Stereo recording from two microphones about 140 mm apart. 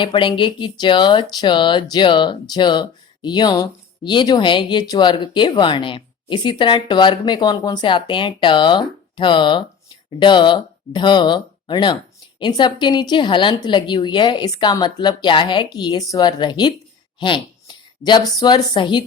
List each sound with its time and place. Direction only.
0.0 s speech: 35° left (ahead or behind)